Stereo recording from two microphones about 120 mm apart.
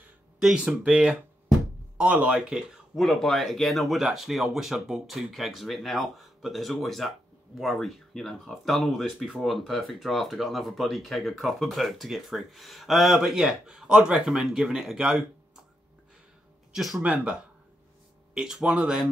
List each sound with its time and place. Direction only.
0.0 s speech: 5° right (ahead or behind)
17.0 s speech: 10° right (ahead or behind)